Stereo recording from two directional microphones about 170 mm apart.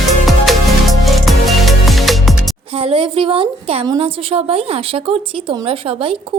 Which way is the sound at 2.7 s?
30° right (ahead or behind).